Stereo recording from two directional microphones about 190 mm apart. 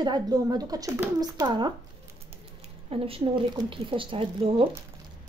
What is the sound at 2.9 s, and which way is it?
Speech, 30° right (ahead or behind).